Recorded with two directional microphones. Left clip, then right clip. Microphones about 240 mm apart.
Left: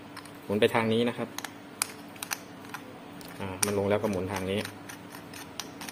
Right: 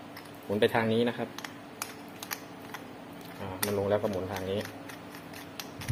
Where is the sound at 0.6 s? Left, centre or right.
Centre.